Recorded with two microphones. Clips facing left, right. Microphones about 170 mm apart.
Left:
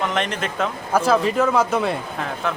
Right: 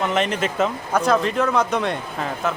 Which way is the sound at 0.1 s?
5° right (ahead or behind).